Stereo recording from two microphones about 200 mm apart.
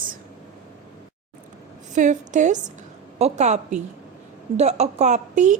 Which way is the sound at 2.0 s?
40° right (ahead or behind).